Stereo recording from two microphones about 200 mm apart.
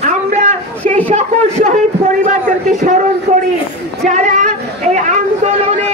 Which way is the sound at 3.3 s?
40° right (ahead or behind).